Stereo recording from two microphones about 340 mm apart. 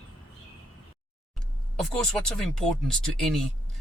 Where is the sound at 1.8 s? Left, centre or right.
Centre.